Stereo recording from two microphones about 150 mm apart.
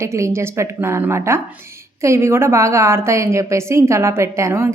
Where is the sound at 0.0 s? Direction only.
20° right (ahead or behind).